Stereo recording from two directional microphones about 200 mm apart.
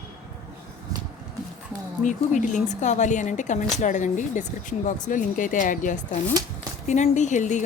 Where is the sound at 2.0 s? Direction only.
40° left (ahead or behind).